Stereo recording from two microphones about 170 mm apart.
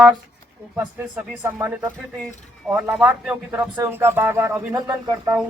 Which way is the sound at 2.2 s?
5° right (ahead or behind).